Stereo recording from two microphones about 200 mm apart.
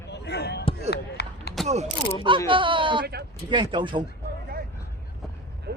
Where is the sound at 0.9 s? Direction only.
55° left (ahead or behind).